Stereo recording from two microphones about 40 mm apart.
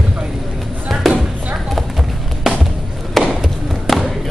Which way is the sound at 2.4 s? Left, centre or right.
Centre.